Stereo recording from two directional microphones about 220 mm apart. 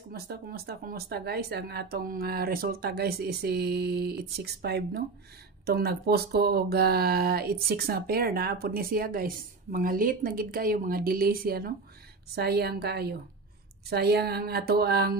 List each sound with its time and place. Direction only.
0.1 s speech: 45° right (ahead or behind)